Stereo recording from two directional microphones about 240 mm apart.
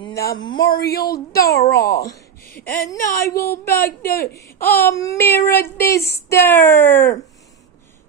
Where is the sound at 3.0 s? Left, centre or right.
Left.